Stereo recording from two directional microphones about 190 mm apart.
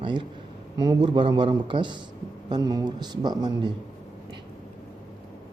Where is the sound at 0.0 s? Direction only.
25° right (ahead or behind).